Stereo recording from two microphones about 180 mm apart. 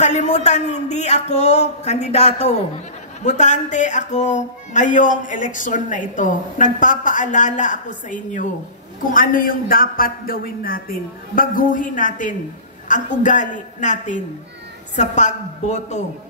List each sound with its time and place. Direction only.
0.0 s speech: 40° left (ahead or behind)